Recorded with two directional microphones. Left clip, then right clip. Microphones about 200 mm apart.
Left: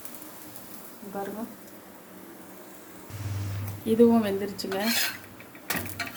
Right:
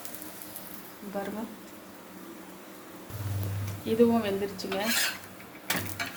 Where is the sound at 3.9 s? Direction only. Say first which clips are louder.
Left 3 dB; 30° left (ahead or behind).